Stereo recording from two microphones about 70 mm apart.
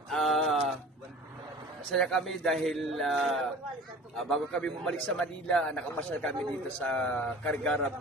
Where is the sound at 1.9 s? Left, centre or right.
Centre.